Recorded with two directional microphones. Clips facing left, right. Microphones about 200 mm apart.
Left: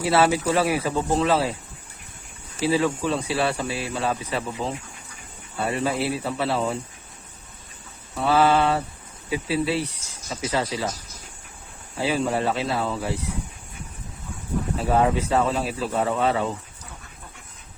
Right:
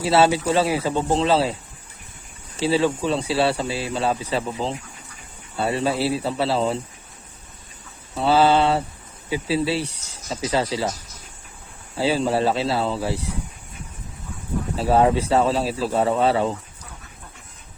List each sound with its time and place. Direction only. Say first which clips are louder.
0.0 s speech: right 2 dB; 25° right (ahead or behind)
2.6 s speech: right 2 dB; 30° right (ahead or behind)
8.1 s speech: right 2 dB; 25° right (ahead or behind)
11.9 s speech: right 3 dB; 30° right (ahead or behind)
14.8 s speech: right 4 dB; 30° right (ahead or behind)